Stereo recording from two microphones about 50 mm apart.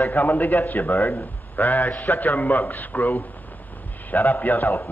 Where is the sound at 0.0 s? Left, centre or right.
Left.